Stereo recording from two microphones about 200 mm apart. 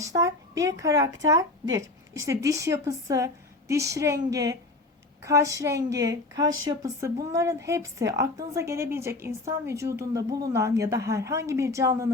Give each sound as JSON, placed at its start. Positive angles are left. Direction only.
{"t": 0.0, "sound": "a woman's voice", "side_deg": -15}